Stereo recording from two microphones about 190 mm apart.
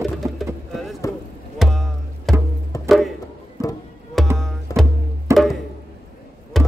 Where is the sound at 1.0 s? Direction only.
15° left (ahead or behind).